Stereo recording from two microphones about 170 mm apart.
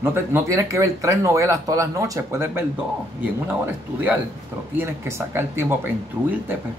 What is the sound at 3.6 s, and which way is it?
Speech, 10° right (ahead or behind).